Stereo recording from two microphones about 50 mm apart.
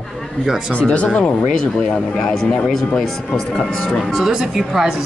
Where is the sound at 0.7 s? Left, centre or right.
Left.